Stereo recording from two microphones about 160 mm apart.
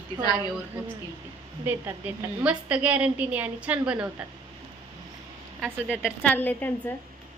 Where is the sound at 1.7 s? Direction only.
10° right (ahead or behind).